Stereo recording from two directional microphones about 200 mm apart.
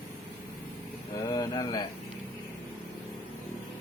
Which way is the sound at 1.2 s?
20° left (ahead or behind).